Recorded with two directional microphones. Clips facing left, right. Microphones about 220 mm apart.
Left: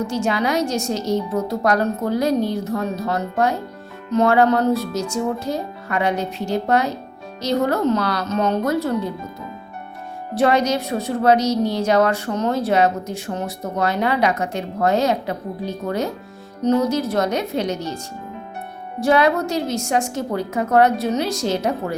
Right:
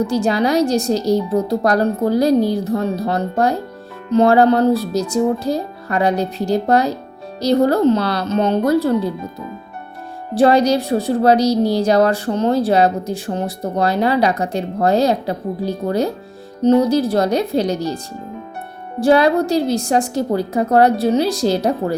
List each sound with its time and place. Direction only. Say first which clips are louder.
0.0 s a woman's voice: right 4 dB; 35° right (ahead or behind)
10.3 s a woman's voice: right 5 dB; 35° right (ahead or behind)